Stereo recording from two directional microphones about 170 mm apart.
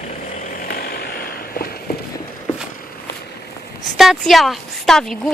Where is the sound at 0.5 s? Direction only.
60° left (ahead or behind).